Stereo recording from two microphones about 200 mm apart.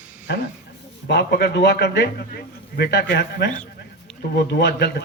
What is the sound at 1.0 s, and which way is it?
A man's voice, 60° left (ahead or behind).